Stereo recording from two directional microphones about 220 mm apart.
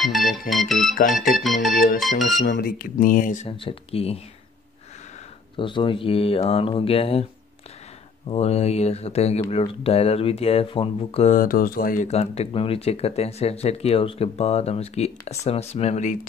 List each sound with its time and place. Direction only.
0.0 s organ: centre (ahead or behind)
0.5 s speech: centre (ahead or behind)
2.4 s speech: 45° left (ahead or behind); by 4.2 s 25° left (ahead or behind)
5.6 s speech: 20° left (ahead or behind)
8.3 s speech: 30° left (ahead or behind)